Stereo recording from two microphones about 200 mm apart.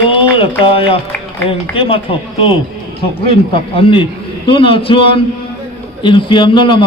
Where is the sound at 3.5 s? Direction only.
25° left (ahead or behind).